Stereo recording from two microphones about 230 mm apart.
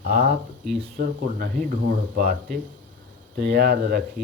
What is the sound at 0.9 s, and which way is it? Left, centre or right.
Speech, right.